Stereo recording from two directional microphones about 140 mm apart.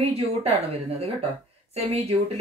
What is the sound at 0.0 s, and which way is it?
Speech, 45° right (ahead or behind).